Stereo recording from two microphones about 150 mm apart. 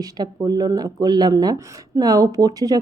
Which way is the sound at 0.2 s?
25° right (ahead or behind).